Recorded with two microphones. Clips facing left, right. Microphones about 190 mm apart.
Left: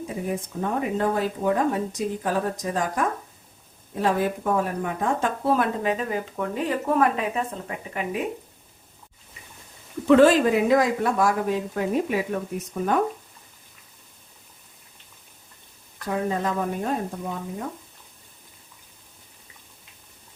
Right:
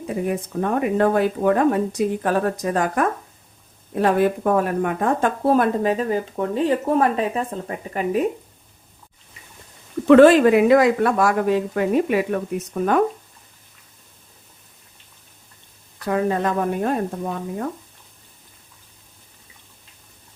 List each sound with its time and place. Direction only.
0.3 s speech: 65° right (ahead or behind); by 8.2 s 40° right (ahead or behind)
10.1 s speech: 65° right (ahead or behind)
16.0 s speech: 65° right (ahead or behind)